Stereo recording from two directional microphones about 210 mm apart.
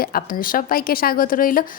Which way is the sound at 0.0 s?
45° left (ahead or behind).